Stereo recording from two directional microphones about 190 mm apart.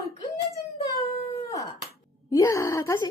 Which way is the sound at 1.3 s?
15° left (ahead or behind).